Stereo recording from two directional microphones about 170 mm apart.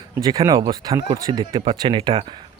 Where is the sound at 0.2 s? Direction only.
20° right (ahead or behind).